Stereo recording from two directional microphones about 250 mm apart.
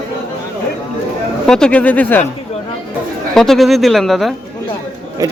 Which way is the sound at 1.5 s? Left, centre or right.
Centre.